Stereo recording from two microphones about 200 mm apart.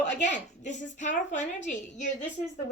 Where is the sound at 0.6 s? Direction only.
40° left (ahead or behind).